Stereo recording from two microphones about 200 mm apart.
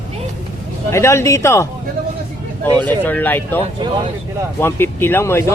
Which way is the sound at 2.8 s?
10° left (ahead or behind).